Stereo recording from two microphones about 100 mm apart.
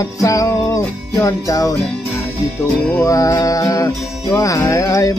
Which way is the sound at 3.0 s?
35° left (ahead or behind).